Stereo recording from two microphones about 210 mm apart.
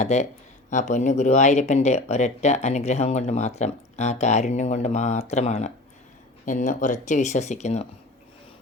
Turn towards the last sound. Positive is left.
turn(degrees=30)  # may be behind; listen again after turning